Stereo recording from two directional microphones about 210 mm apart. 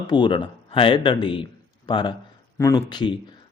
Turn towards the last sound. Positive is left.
turn(degrees=20)  # may be behind; listen again after turning